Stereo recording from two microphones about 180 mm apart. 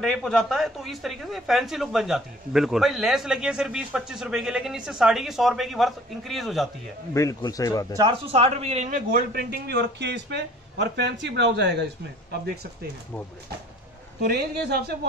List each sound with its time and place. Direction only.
0.0 s speech: centre (ahead or behind)
7.2 s a man's voice: 20° left (ahead or behind)
7.9 s speech: 20° right (ahead or behind)
8.3 s speech: 35° right (ahead or behind)
9.1 s a man's voice: 60° right (ahead or behind)
14.2 s speech: 60° right (ahead or behind)